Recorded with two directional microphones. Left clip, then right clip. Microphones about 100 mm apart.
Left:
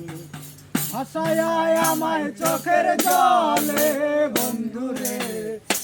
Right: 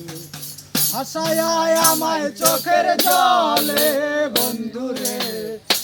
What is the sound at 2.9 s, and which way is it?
Music, 10° right (ahead or behind).